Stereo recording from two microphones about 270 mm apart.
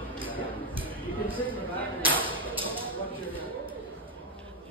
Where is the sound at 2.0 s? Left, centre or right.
Centre.